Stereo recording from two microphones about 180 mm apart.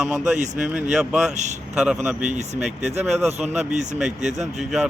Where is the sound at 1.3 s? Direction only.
40° right (ahead or behind).